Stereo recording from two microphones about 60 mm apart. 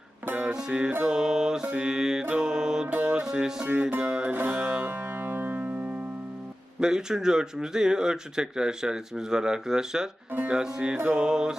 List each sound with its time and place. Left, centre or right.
0.4 s speech: centre
2.3 s music: centre
2.8 s music: right
3.7 s music: right
4.0 s music: centre
4.4 s music: right
6.7 s speech: centre